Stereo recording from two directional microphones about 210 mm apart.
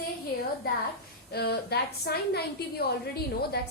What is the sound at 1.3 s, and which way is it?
A woman's voice, 50° left (ahead or behind).